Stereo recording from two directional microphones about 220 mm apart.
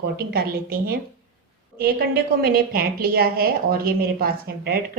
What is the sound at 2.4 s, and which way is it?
A woman's voice, 45° right (ahead or behind).